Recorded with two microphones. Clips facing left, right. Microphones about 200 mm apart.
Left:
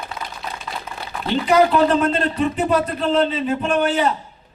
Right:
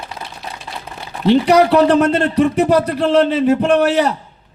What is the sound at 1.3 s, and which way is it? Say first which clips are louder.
A man's voice: right 5 dB; 80° right.